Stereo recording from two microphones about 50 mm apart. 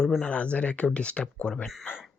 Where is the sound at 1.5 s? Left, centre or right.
Centre.